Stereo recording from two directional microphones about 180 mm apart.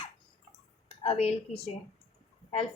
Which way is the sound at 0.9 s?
35° left (ahead or behind).